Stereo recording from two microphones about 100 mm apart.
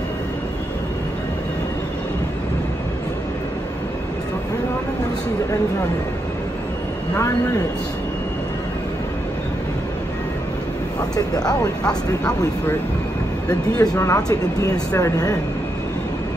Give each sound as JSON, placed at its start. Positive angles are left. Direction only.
{"t": 11.1, "sound": "speech", "side_deg": 40}
{"t": 13.5, "sound": "speech", "side_deg": 35}